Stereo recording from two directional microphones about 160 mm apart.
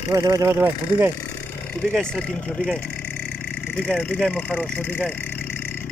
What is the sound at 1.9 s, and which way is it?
Speech, 5° left (ahead or behind).